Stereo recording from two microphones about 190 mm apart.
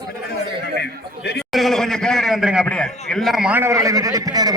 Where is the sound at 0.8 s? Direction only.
60° left (ahead or behind).